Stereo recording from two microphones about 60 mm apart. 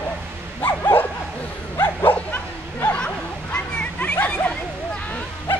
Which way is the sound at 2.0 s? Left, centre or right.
Left.